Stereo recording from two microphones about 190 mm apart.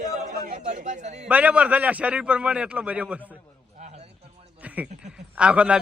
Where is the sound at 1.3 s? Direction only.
10° right (ahead or behind).